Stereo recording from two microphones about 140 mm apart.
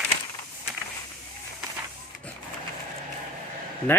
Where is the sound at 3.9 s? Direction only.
15° left (ahead or behind).